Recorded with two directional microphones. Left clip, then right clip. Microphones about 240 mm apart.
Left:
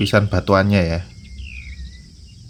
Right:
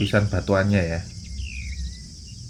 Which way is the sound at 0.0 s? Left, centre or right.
Left.